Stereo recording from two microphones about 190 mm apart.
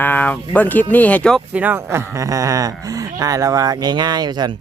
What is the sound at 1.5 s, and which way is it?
Speech, 10° right (ahead or behind).